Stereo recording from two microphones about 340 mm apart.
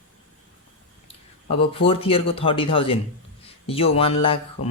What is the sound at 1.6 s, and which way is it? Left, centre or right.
Speech, centre.